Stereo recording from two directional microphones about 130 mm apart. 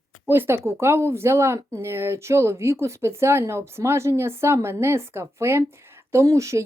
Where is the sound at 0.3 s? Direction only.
15° right (ahead or behind).